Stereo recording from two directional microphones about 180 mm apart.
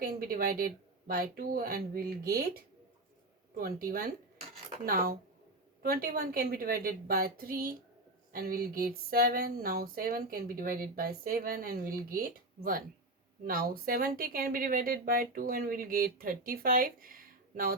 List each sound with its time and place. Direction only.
0.0 s speech: 55° right (ahead or behind)
3.5 s a woman's voice: 55° right (ahead or behind)